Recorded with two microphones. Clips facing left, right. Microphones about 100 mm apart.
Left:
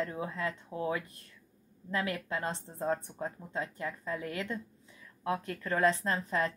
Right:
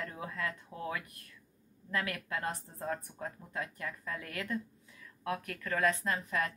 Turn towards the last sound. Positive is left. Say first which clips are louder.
# left 3 dB
turn(degrees=30)  # may be behind; listen again after turning